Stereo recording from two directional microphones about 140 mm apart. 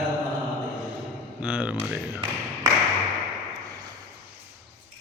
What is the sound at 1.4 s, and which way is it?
Speech, 10° right (ahead or behind).